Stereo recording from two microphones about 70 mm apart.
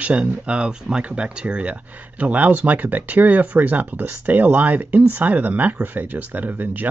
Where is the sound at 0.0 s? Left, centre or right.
Centre.